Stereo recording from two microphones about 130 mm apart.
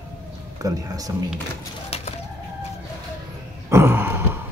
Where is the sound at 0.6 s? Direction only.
25° right (ahead or behind).